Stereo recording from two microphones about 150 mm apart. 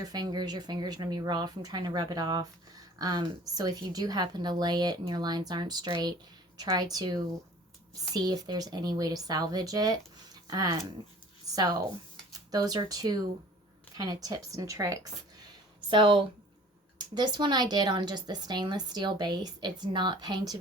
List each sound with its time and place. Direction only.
0.0 s speech: 25° right (ahead or behind)
15.9 s speech: 30° right (ahead or behind)